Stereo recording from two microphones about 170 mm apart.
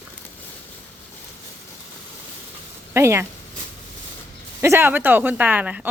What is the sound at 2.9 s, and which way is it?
Speech, 15° right (ahead or behind).